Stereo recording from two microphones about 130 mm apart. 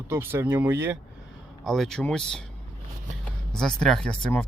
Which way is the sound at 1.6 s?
Centre (ahead or behind).